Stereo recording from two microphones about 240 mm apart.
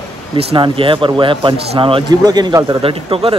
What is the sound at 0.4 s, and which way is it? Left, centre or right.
A man's voice, right.